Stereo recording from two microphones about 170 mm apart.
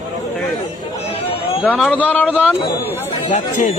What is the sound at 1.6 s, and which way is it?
Speech, 5° left (ahead or behind).